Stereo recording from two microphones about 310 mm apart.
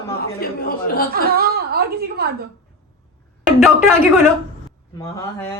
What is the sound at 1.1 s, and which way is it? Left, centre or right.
A woman's voice, right.